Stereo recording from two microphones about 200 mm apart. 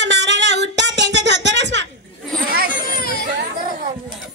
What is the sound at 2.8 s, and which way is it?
Baby cry, 45° left (ahead or behind).